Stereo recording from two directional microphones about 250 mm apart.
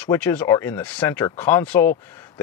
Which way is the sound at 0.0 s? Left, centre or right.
Centre.